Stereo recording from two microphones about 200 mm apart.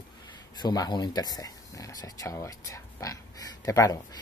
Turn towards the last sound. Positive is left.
turn(degrees=15)  # may be behind; listen again after turning